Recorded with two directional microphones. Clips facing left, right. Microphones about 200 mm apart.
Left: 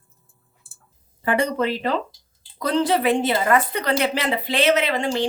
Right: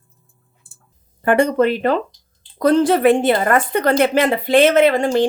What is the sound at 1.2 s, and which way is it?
A woman's voice, 55° right (ahead or behind).